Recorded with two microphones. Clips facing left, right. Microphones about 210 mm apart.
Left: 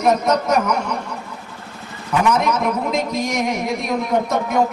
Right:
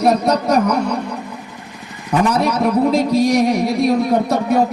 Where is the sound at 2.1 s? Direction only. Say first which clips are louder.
Right 2 dB; 35° right (ahead or behind).